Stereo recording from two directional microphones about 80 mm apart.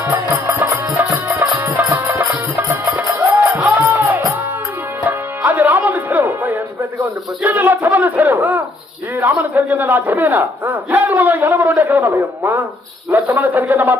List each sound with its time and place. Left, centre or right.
0.6 s music: right
7.4 s a sound: right
9.2 s speech: right